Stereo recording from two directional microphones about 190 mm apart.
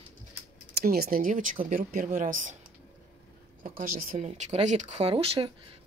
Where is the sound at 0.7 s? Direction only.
55° right (ahead or behind).